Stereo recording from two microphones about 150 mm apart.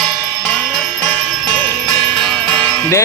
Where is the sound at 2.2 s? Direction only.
5° left (ahead or behind).